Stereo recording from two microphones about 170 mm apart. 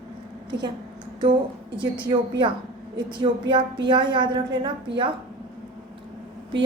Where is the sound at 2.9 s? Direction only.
30° right (ahead or behind).